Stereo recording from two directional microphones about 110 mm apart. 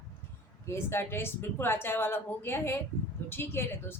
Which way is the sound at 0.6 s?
25° left (ahead or behind).